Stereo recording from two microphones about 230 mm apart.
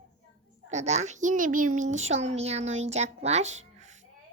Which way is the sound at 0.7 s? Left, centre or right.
Right.